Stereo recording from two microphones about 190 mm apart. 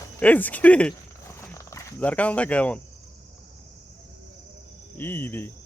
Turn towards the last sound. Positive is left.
turn(degrees=10)  # may be behind; listen again after turning